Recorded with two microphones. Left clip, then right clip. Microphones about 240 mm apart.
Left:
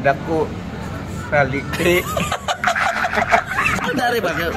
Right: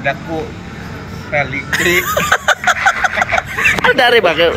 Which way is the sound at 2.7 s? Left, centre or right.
Centre.